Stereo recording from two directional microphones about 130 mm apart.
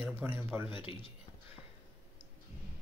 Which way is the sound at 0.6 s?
40° left (ahead or behind).